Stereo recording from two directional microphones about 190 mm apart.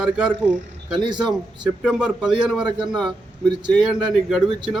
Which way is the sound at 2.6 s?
25° right (ahead or behind).